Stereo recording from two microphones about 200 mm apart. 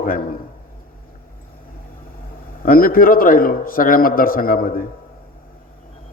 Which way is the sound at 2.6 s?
45° left (ahead or behind).